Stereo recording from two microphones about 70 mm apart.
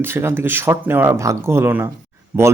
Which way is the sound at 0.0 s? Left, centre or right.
Right.